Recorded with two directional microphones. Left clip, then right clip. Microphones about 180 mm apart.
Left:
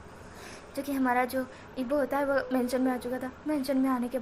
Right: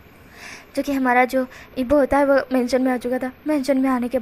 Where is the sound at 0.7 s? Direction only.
35° right (ahead or behind).